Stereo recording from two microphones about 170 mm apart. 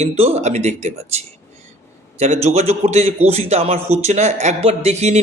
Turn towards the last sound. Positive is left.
turn(degrees=-40)  # may be behind; listen again after turning